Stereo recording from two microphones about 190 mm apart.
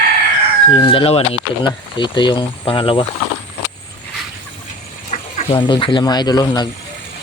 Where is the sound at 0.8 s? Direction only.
30° left (ahead or behind).